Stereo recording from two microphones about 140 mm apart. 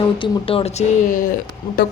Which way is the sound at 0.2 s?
40° left (ahead or behind).